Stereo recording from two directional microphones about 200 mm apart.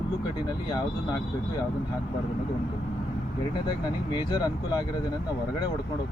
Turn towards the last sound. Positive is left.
turn(degrees=20)  # may be behind; listen again after turning